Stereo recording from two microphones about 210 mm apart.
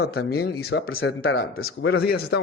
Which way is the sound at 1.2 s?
70° left (ahead or behind).